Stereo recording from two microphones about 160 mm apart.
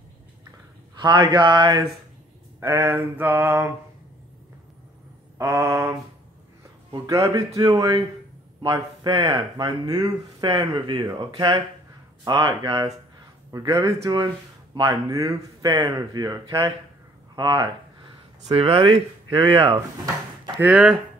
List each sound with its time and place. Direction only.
0.9 s speech: 30° right (ahead or behind)
2.6 s mantra: 15° right (ahead or behind)
5.4 s mantra: 15° right (ahead or behind)
7.1 s speech: 20° right (ahead or behind)
17.4 s a sound: 25° right (ahead or behind)
18.5 s speech: 35° right (ahead or behind)
20.6 s speech: 5° right (ahead or behind)